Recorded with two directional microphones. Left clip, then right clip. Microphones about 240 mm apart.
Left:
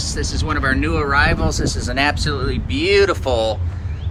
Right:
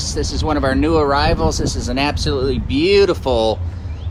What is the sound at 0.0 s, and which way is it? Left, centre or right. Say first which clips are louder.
Speech: right 3 dB; centre.